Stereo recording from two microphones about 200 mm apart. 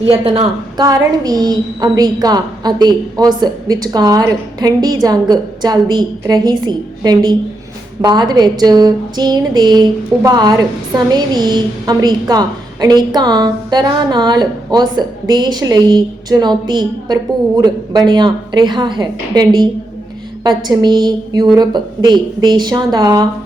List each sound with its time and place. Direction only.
0.1 s a woman's voice: 25° right (ahead or behind)
20.7 s a woman's voice: 20° right (ahead or behind)